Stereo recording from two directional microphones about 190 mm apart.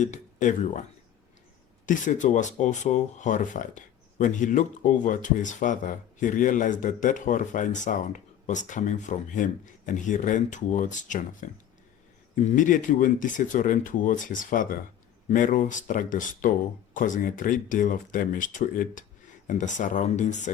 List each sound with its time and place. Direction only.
0.0 s speech: 40° left (ahead or behind)
1.9 s speech: 40° left (ahead or behind)